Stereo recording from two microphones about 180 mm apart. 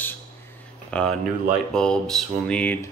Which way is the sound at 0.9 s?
5° left (ahead or behind).